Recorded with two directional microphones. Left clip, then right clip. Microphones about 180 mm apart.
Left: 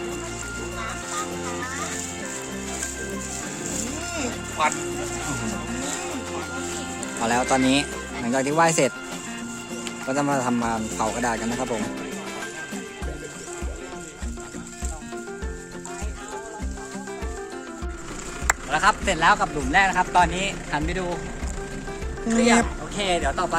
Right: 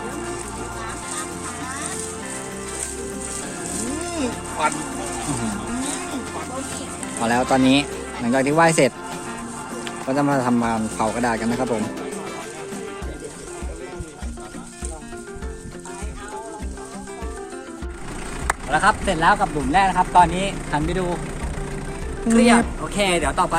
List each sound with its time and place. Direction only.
7.2 s speech: 5° left (ahead or behind)
18.4 s speech: 10° left (ahead or behind)
23.0 s speech: 70° right (ahead or behind)